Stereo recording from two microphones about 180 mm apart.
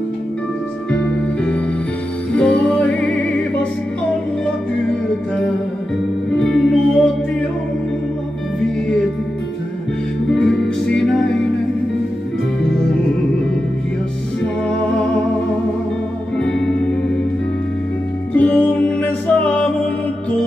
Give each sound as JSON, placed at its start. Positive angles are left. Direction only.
{"t": 0.9, "sound": "music", "side_deg": 5}
{"t": 6.3, "sound": "music", "side_deg": 5}
{"t": 10.3, "sound": "music", "side_deg": 5}
{"t": 12.6, "sound": "music", "side_deg": 5}
{"t": 14.4, "sound": "music", "side_deg": 5}
{"t": 16.3, "sound": "music", "side_deg": 5}
{"t": 18.3, "sound": "music", "side_deg": 10}